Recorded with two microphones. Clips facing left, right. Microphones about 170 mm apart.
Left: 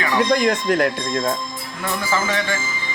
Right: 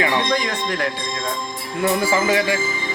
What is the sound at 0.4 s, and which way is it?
Speech, 60° left (ahead or behind).